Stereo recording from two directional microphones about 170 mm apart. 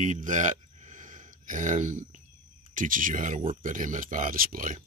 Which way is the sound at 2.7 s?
50° right (ahead or behind).